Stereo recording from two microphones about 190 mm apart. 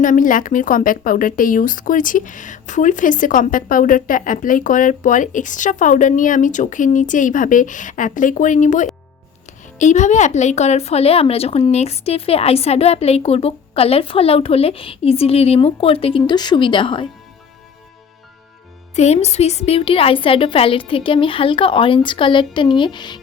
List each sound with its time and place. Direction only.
0.0 s speech: 45° left (ahead or behind); by 17.1 s 25° left (ahead or behind)
18.9 s a woman's voice: 35° left (ahead or behind)